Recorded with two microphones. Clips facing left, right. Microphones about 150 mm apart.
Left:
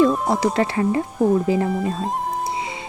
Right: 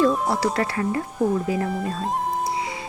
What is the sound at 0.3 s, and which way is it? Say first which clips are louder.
Speech: left 3 dB; 20° left (ahead or behind).